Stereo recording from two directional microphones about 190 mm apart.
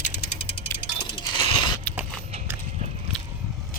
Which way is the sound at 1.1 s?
25° left (ahead or behind).